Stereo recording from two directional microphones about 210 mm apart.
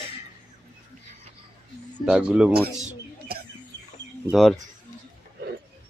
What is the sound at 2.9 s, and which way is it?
Bird, 45° right (ahead or behind).